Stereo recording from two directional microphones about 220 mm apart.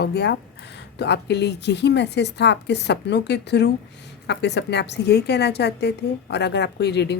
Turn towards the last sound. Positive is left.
turn(degrees=50)  # may be behind; listen again after turning